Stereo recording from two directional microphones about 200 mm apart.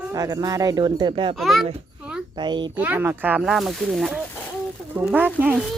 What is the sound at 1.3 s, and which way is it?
Speech, centre (ahead or behind).